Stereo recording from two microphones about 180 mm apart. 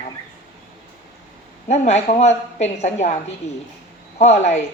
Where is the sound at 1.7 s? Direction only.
40° left (ahead or behind).